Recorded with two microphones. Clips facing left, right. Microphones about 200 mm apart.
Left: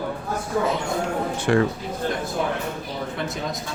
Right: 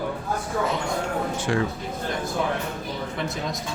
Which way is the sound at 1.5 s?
60° left (ahead or behind).